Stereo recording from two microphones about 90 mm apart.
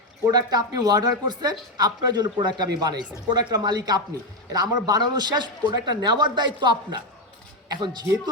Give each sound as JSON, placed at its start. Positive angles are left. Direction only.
{"t": 0.3, "sound": "speech", "side_deg": -45}